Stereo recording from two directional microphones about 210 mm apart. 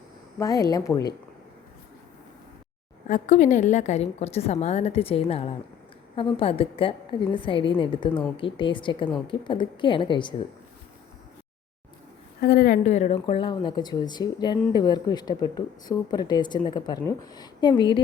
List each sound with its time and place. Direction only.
0.3 s speech: 15° left (ahead or behind)
3.1 s a woman's voice: 35° left (ahead or behind)
12.4 s speech: 45° left (ahead or behind); by 18.0 s 20° left (ahead or behind)